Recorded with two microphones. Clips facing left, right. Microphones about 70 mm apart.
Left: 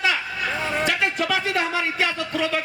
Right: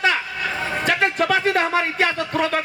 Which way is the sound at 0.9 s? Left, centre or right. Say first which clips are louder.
Right 7 dB; right.